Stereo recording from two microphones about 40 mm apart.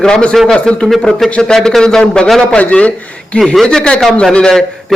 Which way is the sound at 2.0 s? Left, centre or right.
Left.